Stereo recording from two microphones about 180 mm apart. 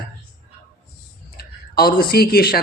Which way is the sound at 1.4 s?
55° left (ahead or behind).